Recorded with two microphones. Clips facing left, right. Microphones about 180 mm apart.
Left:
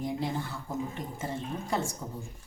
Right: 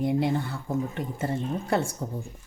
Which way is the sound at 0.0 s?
65° right (ahead or behind).